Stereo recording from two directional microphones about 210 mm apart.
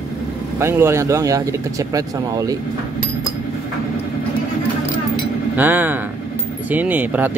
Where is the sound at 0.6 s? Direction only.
10° right (ahead or behind).